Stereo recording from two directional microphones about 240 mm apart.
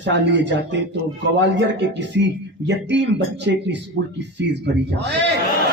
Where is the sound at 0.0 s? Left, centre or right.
Right.